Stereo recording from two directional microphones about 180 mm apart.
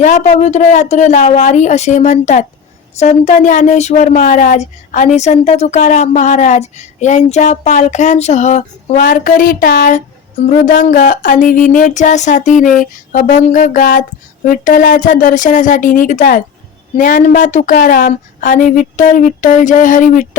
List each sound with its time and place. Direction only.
0.0 s a woman's voice: 40° left (ahead or behind)